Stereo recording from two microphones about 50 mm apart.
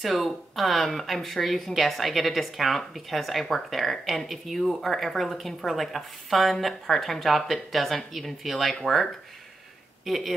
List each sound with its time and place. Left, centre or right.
0.0 s speech: centre